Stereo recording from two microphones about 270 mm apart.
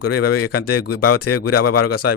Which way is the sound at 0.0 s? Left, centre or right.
Left.